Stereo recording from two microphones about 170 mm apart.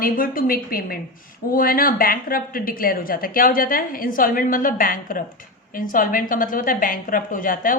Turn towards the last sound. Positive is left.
turn(degrees=55)  # may be behind; listen again after turning